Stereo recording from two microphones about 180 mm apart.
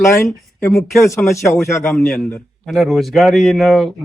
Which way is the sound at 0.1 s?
15° left (ahead or behind).